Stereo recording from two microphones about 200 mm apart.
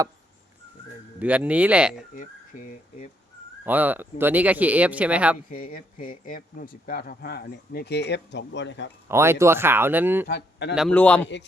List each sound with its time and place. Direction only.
1.2 s speech: 5° right (ahead or behind)
2.1 s speech: 40° left (ahead or behind)
3.7 s speech: 10° right (ahead or behind)
5.5 s speech: 45° left (ahead or behind); by 8.9 s 65° left (ahead or behind)
9.0 s speech: 10° right (ahead or behind)
10.2 s a man's voice: 55° left (ahead or behind)
10.8 s a man's voice: 5° left (ahead or behind)